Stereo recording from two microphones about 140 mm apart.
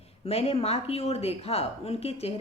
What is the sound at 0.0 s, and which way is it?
Speech, 45° left (ahead or behind).